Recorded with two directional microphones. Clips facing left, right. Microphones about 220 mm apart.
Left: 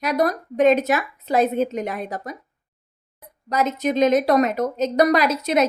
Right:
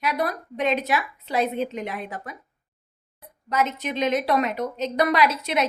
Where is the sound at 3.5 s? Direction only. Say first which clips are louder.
Left 4 dB; 40° left (ahead or behind).